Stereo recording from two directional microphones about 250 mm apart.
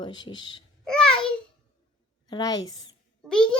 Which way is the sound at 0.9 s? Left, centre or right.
Centre.